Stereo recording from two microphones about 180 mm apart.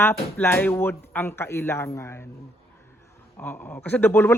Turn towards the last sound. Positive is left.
turn(degrees=10)  # may be behind; listen again after turning